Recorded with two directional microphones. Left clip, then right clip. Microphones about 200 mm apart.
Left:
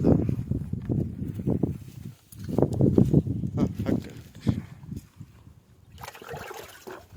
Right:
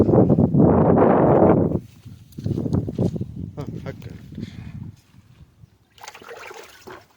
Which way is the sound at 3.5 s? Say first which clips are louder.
Left 7 dB; centre (ahead or behind).